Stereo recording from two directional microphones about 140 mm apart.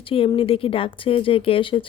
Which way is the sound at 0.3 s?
40° left (ahead or behind).